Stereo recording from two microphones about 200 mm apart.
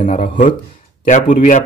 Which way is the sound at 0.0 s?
40° left (ahead or behind).